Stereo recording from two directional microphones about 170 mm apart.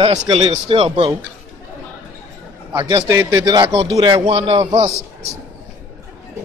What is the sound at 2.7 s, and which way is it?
A man's voice, 20° right (ahead or behind).